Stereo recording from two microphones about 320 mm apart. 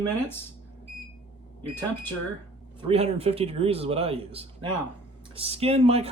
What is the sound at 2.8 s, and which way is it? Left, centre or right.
A man's voice, centre.